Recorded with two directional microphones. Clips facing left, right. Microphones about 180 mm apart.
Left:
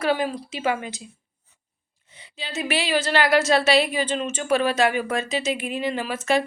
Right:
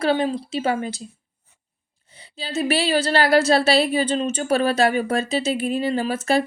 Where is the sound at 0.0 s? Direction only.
30° right (ahead or behind).